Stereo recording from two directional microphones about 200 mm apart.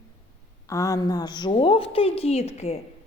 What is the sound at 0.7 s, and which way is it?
A woman's voice, 15° left (ahead or behind).